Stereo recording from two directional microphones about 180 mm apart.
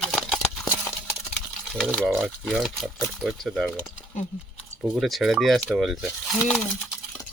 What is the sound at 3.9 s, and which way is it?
Speech, 45° left (ahead or behind).